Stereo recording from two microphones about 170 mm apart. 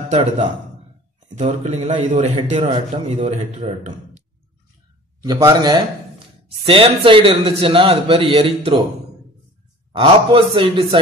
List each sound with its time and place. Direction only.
1.3 s a man's voice: 40° right (ahead or behind)
5.2 s a man's voice: 20° right (ahead or behind)
9.9 s a man's voice: 30° right (ahead or behind)